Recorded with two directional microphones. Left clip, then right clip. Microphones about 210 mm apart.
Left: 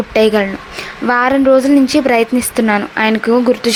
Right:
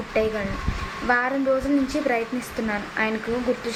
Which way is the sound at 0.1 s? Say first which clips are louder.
Left 12 dB; 50° left (ahead or behind).